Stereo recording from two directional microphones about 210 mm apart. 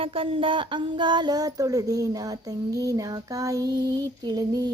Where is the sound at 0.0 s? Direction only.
25° right (ahead or behind).